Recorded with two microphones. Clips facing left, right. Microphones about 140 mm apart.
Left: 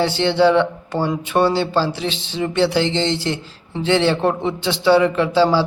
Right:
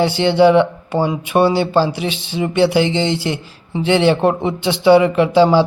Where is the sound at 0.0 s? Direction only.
15° right (ahead or behind).